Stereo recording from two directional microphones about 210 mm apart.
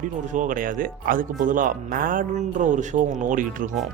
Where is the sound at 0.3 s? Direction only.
40° right (ahead or behind).